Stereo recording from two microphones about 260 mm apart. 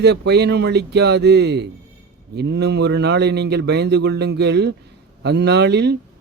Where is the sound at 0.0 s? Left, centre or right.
Right.